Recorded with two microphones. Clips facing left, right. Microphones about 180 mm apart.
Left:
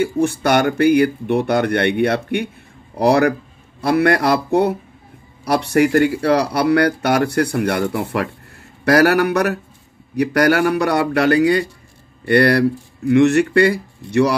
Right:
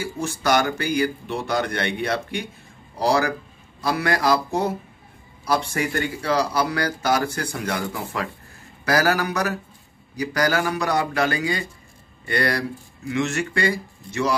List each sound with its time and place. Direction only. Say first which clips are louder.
0.0 s a man's voice: left 8 dB; 60° left (ahead or behind)